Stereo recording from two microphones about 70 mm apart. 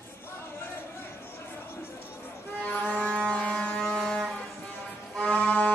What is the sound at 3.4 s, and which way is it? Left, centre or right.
Vehicle, centre.